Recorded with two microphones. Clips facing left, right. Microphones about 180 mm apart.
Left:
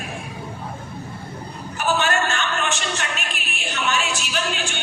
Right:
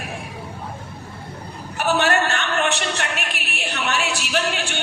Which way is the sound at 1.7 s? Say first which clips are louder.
Right 2 dB; 65° right (ahead or behind).